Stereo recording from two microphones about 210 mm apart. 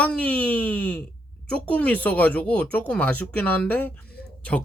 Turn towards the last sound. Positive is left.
turn(degrees=50)  # may be behind; listen again after turning